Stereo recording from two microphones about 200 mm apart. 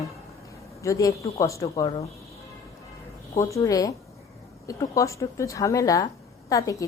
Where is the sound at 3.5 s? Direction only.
15° left (ahead or behind).